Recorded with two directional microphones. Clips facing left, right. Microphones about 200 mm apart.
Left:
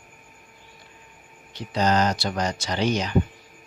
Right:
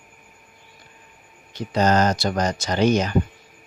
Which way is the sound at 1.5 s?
45° right (ahead or behind).